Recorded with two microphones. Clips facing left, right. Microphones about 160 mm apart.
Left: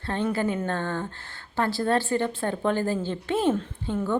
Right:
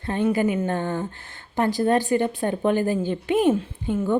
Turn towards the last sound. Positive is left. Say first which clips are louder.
# right 4 dB
turn(degrees=-10)  # may be behind; listen again after turning